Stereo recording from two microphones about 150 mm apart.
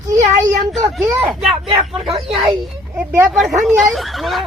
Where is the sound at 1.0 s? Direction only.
5° right (ahead or behind).